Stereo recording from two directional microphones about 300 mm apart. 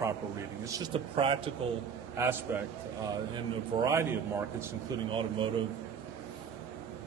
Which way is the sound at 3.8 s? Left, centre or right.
Centre.